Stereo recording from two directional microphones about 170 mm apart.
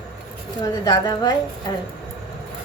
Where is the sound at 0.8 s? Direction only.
25° left (ahead or behind).